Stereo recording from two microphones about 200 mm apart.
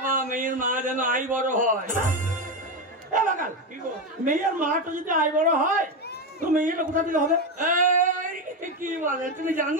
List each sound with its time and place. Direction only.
0.1 s a man's voice: 40° right (ahead or behind)
3.1 s a sound: 40° right (ahead or behind)
4.2 s speech: 40° right (ahead or behind)